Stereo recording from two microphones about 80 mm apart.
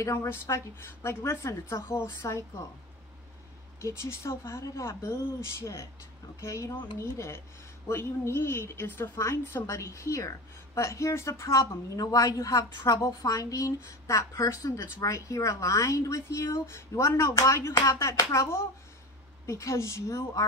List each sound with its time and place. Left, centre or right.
0.0 s a woman's voice: left
3.8 s a woman's voice: left
9.1 s a woman's voice: left